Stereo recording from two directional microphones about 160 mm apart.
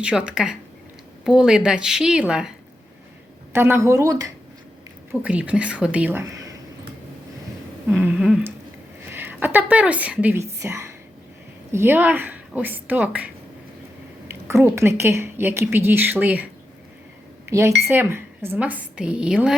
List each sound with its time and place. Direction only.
0.0 s a woman's voice: 5° right (ahead or behind)
3.5 s speech: 15° right (ahead or behind)
5.1 s a woman's voice: 10° right (ahead or behind)
7.9 s a woman's voice: 10° right (ahead or behind)
17.4 s a sound: 15° right (ahead or behind)
17.9 s a woman's voice: 15° right (ahead or behind)